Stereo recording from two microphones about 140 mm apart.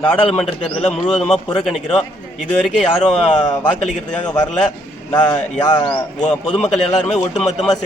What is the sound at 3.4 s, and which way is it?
Speech, 30° left (ahead or behind).